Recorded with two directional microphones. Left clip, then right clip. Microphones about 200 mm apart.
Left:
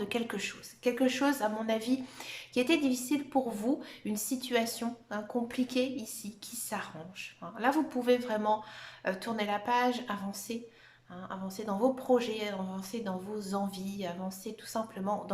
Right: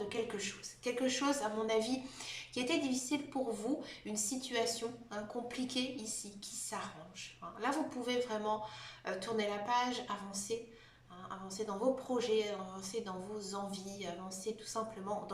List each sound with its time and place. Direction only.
0.1 s a woman's voice: 45° left (ahead or behind)